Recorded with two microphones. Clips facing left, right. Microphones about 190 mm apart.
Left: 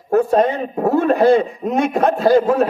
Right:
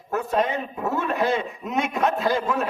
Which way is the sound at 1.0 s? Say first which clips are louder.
Left 11 dB; 45° left (ahead or behind).